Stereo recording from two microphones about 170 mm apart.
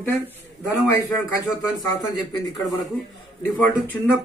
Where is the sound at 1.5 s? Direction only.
20° left (ahead or behind).